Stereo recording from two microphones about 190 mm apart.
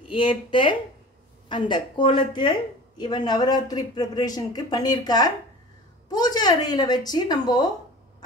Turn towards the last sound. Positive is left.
turn(degrees=20)  # may be behind; listen again after turning